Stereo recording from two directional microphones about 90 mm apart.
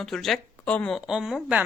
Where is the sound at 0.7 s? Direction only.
15° left (ahead or behind).